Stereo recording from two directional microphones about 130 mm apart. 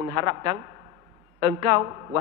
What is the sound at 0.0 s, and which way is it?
A woman's voice, 25° right (ahead or behind).